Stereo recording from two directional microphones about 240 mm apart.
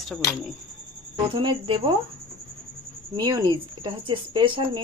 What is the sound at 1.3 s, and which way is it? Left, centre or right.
Cricket, centre.